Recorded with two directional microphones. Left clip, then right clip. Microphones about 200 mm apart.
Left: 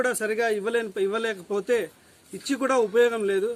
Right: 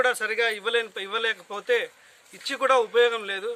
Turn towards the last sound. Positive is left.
turn(degrees=0)  # may be behind; listen again after turning